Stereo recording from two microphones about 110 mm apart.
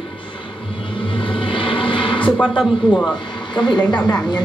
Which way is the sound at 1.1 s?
50° left (ahead or behind).